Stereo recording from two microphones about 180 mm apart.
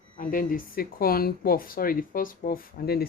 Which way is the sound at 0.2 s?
50° left (ahead or behind).